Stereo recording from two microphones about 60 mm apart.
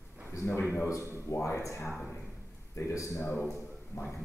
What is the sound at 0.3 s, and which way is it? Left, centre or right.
A man's voice, left.